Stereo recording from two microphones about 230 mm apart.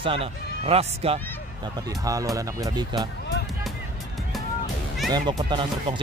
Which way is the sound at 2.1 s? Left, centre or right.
Centre.